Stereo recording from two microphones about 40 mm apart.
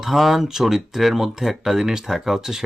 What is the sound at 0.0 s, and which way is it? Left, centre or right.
Speech, centre.